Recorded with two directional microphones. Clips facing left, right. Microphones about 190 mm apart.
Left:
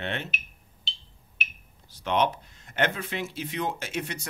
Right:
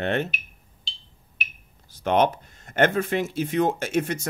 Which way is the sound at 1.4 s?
45° right (ahead or behind).